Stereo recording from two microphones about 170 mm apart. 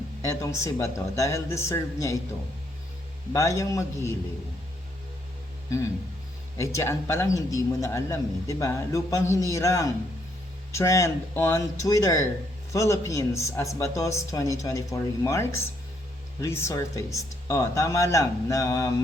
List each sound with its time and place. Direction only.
0.2 s speech: 20° left (ahead or behind)
3.3 s speech: 20° left (ahead or behind)
6.6 s a man's voice: 15° left (ahead or behind)